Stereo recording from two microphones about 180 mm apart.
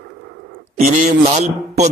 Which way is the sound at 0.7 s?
45° right (ahead or behind).